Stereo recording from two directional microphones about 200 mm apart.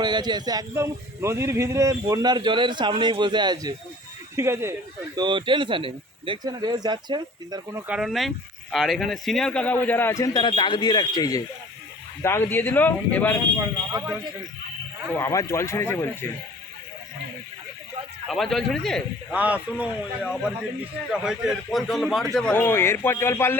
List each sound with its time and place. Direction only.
0.0 s speech: 20° right (ahead or behind)
5.1 s a man's voice: 25° right (ahead or behind); by 13.3 s 10° left (ahead or behind)
13.6 s speech: 15° right (ahead or behind)
15.1 s a man's voice: 15° left (ahead or behind)
18.3 s a man's voice: centre (ahead or behind)